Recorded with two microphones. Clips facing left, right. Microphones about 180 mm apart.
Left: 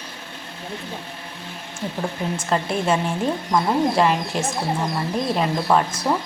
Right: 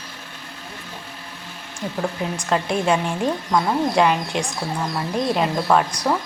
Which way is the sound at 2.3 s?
5° left (ahead or behind).